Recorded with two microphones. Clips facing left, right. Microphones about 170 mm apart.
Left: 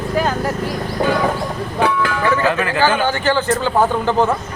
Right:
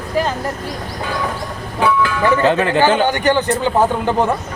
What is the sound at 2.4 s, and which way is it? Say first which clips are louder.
A man's voice: right 5 dB; 25° right (ahead or behind).